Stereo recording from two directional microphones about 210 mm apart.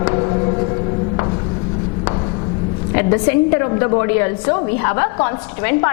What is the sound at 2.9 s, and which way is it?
A woman's voice, 15° left (ahead or behind).